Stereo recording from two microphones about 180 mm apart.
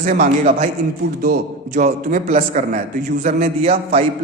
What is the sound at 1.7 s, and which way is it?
A man's voice, 40° right (ahead or behind).